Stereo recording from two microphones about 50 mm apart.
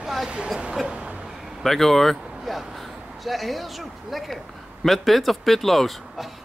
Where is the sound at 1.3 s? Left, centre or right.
Centre.